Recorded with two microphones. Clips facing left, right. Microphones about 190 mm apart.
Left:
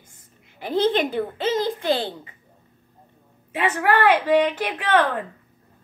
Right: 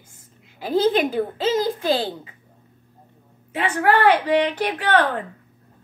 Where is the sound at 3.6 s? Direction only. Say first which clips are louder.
Right 2 dB; 5° left (ahead or behind).